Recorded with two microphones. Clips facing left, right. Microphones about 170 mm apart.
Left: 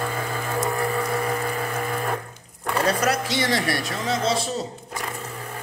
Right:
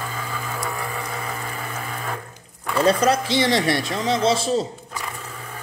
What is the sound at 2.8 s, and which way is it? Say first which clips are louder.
Speech: right 5 dB; 25° right (ahead or behind).